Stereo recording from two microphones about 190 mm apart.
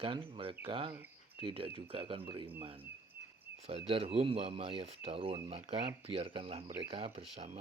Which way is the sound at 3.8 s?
30° right (ahead or behind).